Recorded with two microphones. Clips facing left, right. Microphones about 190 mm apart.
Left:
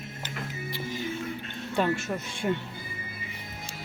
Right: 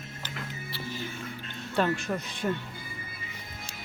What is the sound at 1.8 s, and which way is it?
Speech, 5° left (ahead or behind).